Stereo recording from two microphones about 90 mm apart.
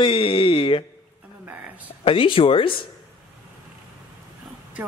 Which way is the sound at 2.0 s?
80° left.